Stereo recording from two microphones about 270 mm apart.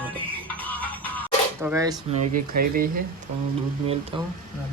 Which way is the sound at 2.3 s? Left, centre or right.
Right.